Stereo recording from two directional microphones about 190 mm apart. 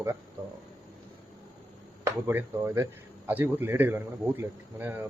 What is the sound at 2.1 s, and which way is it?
Speech, 15° right (ahead or behind).